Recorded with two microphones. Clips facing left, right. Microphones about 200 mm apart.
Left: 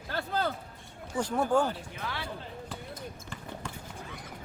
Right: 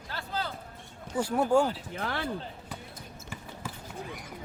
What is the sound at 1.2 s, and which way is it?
Speech, 10° right (ahead or behind).